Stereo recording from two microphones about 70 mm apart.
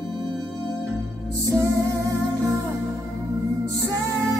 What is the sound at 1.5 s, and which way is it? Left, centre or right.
Music, right.